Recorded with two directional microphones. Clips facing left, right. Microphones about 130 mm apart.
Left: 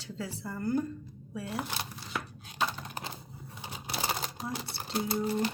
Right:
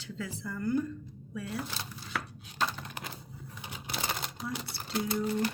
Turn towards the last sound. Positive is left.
turn(degrees=30)  # may be behind; listen again after turning